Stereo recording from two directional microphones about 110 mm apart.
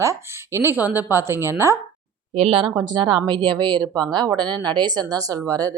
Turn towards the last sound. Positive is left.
turn(degrees=-30)  # may be behind; listen again after turning